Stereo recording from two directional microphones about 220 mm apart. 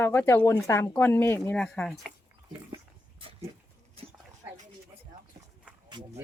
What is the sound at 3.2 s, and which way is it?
Dog, 25° right (ahead or behind).